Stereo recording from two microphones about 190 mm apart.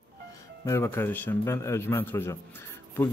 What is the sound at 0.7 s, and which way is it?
Speech, 15° left (ahead or behind).